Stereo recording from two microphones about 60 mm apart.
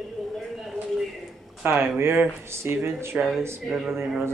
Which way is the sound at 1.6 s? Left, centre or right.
Right.